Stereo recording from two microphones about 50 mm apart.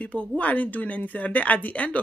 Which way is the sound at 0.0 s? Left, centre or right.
Left.